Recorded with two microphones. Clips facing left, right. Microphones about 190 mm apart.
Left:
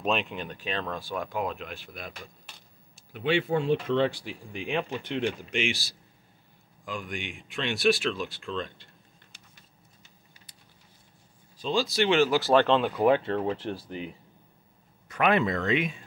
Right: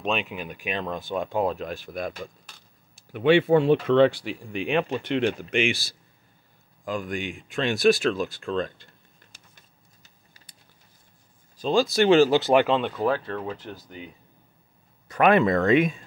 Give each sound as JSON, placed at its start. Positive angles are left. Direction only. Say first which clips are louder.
{"t": 0.0, "sound": "speech", "louder": "right 1 dB", "side_deg": 0}
{"t": 3.1, "sound": "speech", "louder": "right 8 dB", "side_deg": -60}
{"t": 6.8, "sound": "speech", "louder": "right 6 dB", "side_deg": -45}
{"t": 11.5, "sound": "speech", "louder": "right 5 dB", "side_deg": -45}
{"t": 12.4, "sound": "speech", "louder": "right 2 dB", "side_deg": -20}
{"t": 12.6, "sound": "speech", "louder": "even", "side_deg": 0}
{"t": 12.9, "sound": "speech", "louder": "left 3 dB", "side_deg": 20}
{"t": 15.0, "sound": "speech", "louder": "right 5 dB", "side_deg": -45}